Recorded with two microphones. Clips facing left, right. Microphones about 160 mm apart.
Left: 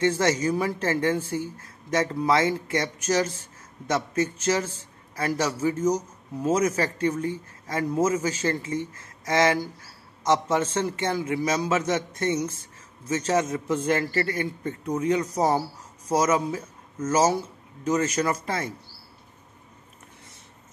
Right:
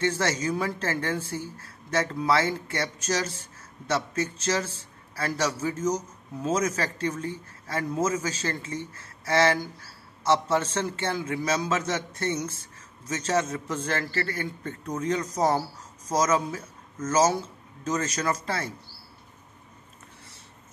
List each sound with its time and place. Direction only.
0.0 s a man's voice: 15° left (ahead or behind)